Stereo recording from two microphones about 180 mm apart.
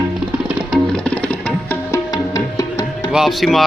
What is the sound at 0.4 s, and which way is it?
Music, centre (ahead or behind).